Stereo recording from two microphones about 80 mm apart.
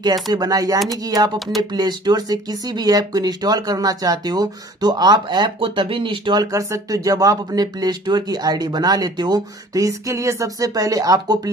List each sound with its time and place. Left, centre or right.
0.0 s speech: right
1.6 s speech: right
6.4 s speech: right
9.8 s speech: right